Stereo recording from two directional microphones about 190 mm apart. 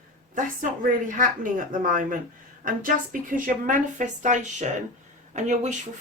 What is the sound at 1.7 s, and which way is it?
Speech, 45° right (ahead or behind).